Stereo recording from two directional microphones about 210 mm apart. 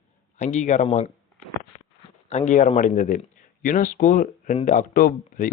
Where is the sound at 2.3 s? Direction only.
35° left (ahead or behind).